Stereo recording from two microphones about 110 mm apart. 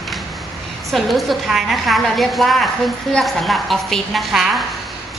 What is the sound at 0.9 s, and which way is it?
A woman's voice, centre (ahead or behind).